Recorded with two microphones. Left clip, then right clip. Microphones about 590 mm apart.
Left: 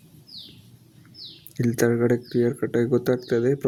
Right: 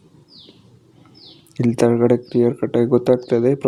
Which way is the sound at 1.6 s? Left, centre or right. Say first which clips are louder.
Right 6 dB; left.